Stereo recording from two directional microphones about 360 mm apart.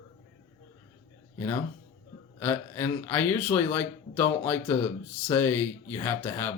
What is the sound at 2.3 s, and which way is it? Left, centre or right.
Speech, centre.